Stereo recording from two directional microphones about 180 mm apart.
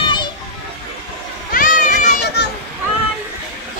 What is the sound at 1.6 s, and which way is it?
Children playing, 50° left (ahead or behind).